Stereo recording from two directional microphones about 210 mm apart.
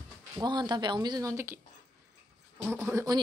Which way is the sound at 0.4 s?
20° right (ahead or behind).